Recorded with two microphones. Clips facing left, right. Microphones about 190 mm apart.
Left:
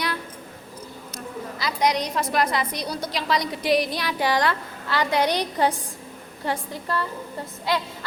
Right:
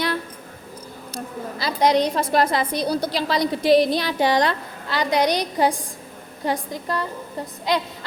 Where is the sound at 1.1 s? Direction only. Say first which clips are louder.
Right 3 dB; 30° right (ahead or behind).